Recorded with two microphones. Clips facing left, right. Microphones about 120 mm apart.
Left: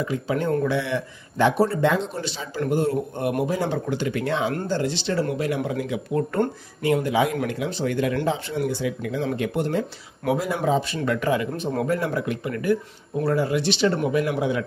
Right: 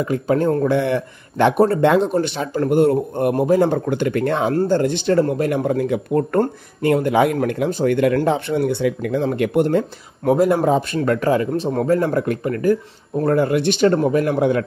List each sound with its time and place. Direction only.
0.0 s speech: 50° right (ahead or behind)
0.7 s speech: 50° right (ahead or behind)
11.0 s speech: 40° right (ahead or behind)